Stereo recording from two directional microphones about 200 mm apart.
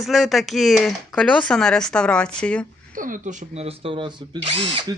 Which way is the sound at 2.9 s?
45° right (ahead or behind).